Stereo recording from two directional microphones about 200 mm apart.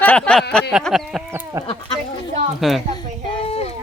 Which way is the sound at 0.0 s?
5° left (ahead or behind).